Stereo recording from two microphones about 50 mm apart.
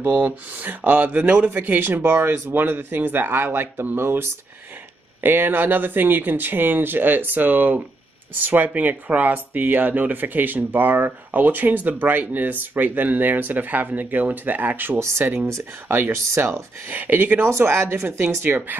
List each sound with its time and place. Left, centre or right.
0.0 s speech: right
15.0 s speech: right
15.2 s speech: right
16.3 s speech: right
16.9 s speech: right
17.5 s speech: right